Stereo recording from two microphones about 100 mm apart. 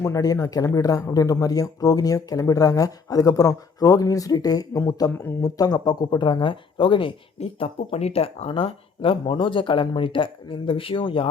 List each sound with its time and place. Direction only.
0.0 s speech: 35° left (ahead or behind); by 11.3 s 60° left (ahead or behind)